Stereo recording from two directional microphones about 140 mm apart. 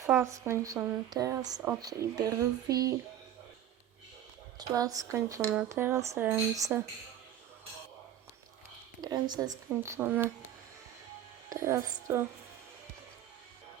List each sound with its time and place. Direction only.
0.0 s speech: 20° right (ahead or behind)
4.5 s speech: 25° right (ahead or behind)
9.0 s speech: 30° right (ahead or behind)
11.4 s speech: 20° right (ahead or behind)